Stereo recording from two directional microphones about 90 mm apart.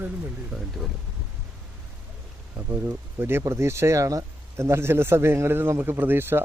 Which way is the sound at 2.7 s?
25° right (ahead or behind).